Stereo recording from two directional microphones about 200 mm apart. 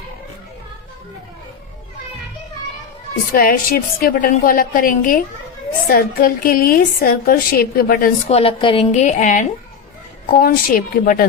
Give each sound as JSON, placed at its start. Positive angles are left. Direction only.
{"t": 3.3, "sound": "a woman's voice", "side_deg": 45}
{"t": 8.3, "sound": "a woman's voice", "side_deg": 30}